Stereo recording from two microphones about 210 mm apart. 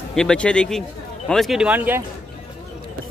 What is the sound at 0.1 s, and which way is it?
Speech, 5° left (ahead or behind).